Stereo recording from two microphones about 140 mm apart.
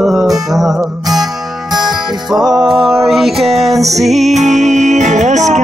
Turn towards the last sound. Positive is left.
turn(degrees=-60)  # may be behind; listen again after turning